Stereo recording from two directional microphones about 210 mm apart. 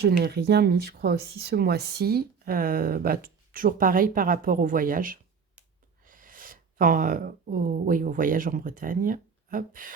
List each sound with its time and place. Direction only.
0.0 s speech: 50° right (ahead or behind)